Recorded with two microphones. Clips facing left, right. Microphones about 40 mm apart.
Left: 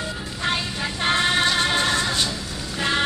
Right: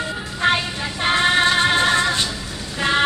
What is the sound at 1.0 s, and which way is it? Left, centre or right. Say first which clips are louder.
Music: right 4 dB; centre.